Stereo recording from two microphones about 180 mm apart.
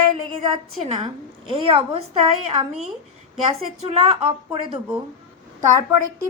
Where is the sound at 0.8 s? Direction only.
30° right (ahead or behind).